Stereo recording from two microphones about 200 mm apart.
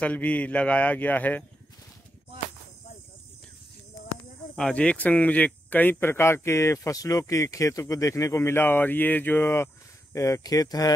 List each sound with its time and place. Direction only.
0.0 s speech: 5° left (ahead or behind)
4.6 s speech: 5° left (ahead or behind)